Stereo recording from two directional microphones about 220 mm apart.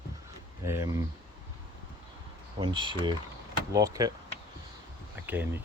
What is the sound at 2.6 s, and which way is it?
Speech, 20° right (ahead or behind).